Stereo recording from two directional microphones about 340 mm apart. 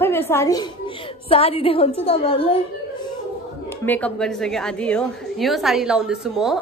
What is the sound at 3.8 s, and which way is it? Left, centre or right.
A woman's voice, centre.